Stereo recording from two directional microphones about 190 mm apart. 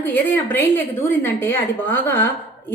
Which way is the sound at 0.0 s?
10° left (ahead or behind).